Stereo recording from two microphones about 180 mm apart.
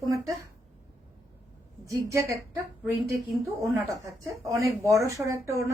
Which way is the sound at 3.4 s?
20° right (ahead or behind).